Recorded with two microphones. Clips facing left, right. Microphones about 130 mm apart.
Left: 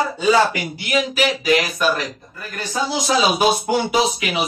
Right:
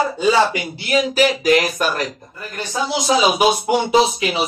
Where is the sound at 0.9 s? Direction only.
40° right (ahead or behind).